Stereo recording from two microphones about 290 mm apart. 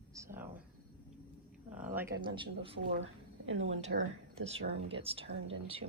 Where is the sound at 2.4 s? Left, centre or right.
Centre.